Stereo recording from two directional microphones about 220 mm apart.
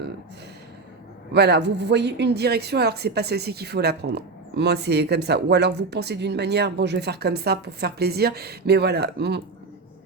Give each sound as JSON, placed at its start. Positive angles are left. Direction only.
{"t": 1.3, "sound": "speech", "side_deg": -50}